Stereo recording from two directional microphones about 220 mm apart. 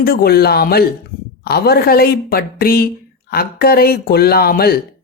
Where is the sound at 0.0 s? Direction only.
45° left (ahead or behind).